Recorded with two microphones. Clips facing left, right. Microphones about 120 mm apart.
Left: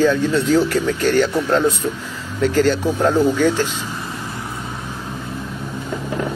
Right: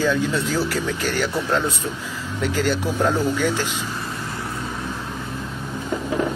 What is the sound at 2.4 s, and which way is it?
Speech, 10° right (ahead or behind).